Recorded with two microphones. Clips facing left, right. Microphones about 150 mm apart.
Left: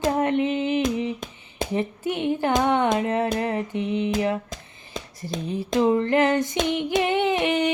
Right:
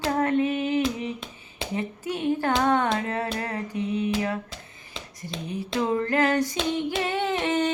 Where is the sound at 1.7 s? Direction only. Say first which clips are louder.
Left 4 dB; 25° left (ahead or behind).